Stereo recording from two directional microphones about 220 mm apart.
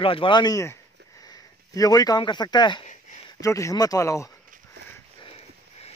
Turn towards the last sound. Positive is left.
turn(degrees=25)  # may be behind; listen again after turning